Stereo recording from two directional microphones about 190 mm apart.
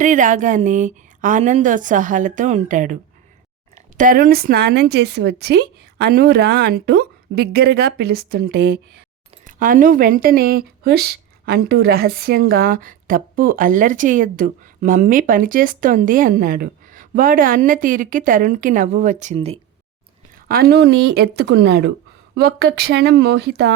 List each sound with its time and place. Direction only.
0.0 s a woman's voice: 40° right (ahead or behind)
9.5 s speech: 45° right (ahead or behind)
20.5 s a woman's voice: 55° right (ahead or behind)